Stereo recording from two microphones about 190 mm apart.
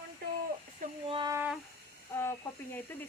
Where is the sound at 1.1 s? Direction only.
25° right (ahead or behind).